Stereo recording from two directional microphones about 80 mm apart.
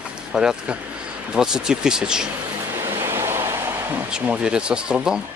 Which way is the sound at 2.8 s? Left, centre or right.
Right.